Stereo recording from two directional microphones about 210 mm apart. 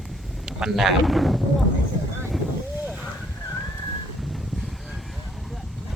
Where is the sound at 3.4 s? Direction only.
10° left (ahead or behind).